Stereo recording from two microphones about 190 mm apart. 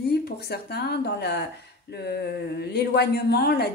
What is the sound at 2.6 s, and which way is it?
Speech, 60° left (ahead or behind).